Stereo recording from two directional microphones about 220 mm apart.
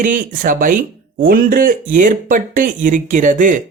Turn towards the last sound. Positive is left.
turn(degrees=-35)  # may be behind; listen again after turning